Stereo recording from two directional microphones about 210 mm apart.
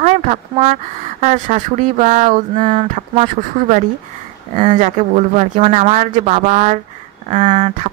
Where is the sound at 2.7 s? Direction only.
25° right (ahead or behind).